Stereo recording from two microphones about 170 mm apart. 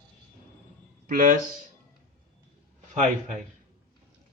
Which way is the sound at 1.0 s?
55° right (ahead or behind).